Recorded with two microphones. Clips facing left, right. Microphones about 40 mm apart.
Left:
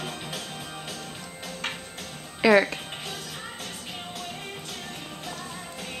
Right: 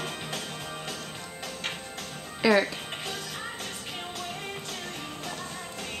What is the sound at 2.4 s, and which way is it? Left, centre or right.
Music, centre.